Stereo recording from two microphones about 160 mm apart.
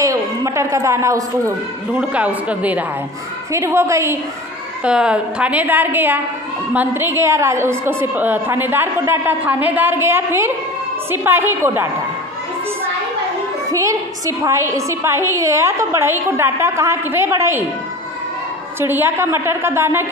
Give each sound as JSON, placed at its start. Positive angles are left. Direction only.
{"t": 0.0, "sound": "a woman's voice", "side_deg": -20}
{"t": 2.0, "sound": "a woman's voice", "side_deg": -10}
{"t": 4.8, "sound": "a woman's voice", "side_deg": -5}
{"t": 13.7, "sound": "a woman's voice", "side_deg": -20}
{"t": 18.8, "sound": "a woman's voice", "side_deg": -15}